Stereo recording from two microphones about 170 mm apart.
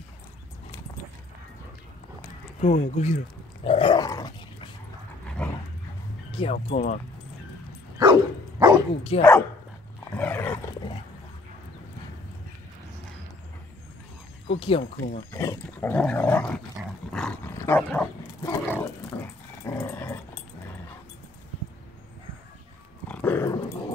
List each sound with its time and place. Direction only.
2.7 s speech: 45° left (ahead or behind)
3.6 s dog: 30° left (ahead or behind)
5.4 s dog: 5° left (ahead or behind)
6.3 s speech: 35° left (ahead or behind)
8.0 s dog: 25° right (ahead or behind)
9.1 s speech: 35° left (ahead or behind)
10.1 s roar: 10° left (ahead or behind)
14.8 s speech: 55° left (ahead or behind)
15.3 s dog: 15° left (ahead or behind)
23.0 s dog: 10° left (ahead or behind)